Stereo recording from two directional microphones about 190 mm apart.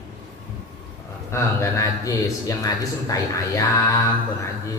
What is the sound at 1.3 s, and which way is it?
Speech, 15° left (ahead or behind).